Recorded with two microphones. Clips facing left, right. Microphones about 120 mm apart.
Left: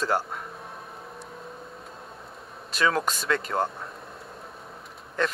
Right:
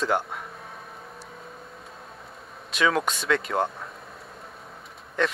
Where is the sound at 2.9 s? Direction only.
Centre (ahead or behind).